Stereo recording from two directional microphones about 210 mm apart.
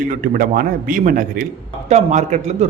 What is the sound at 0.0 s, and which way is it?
A man's voice, 40° right (ahead or behind).